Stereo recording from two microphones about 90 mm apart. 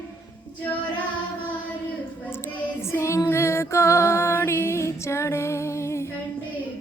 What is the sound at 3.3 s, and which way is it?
Female singing, 30° left (ahead or behind).